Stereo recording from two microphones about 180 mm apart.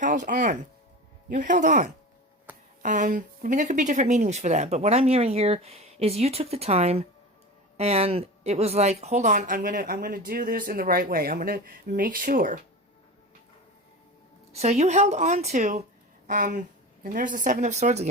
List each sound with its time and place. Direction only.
0.0 s a woman's voice: 45° right (ahead or behind)
14.5 s speech: 35° right (ahead or behind)